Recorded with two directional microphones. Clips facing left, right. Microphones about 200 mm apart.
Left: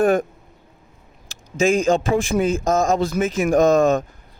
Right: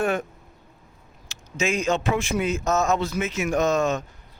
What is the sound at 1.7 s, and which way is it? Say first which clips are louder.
Speech: left 4 dB; 50° left (ahead or behind).